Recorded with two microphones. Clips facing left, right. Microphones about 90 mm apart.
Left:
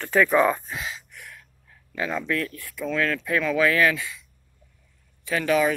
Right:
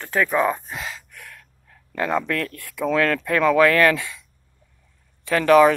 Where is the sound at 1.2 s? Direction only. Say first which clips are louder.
Right 1 dB; 65° right (ahead or behind).